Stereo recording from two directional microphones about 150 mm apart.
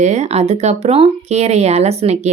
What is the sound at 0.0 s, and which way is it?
Speech, 50° right (ahead or behind).